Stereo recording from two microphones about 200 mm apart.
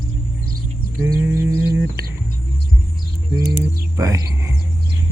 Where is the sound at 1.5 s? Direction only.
60° right (ahead or behind).